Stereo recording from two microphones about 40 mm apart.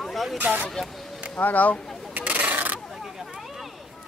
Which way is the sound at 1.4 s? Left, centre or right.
Left.